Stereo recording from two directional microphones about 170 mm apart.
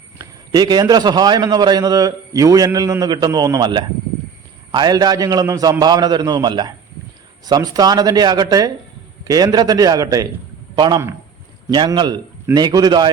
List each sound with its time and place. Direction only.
0.2 s a man's voice: 20° right (ahead or behind)